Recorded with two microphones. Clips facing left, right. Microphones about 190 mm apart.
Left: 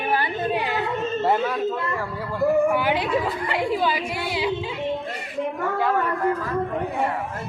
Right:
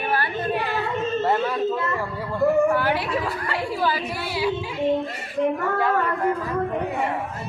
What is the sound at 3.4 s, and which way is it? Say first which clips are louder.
A woman's voice: left 2 dB; 20° left (ahead or behind).